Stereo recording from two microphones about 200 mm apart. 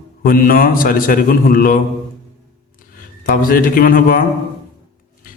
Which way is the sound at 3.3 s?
45° left (ahead or behind).